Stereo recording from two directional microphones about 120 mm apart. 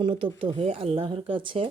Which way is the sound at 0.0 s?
45° right (ahead or behind).